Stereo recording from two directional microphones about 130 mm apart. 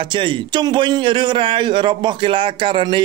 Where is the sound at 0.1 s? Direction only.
40° right (ahead or behind).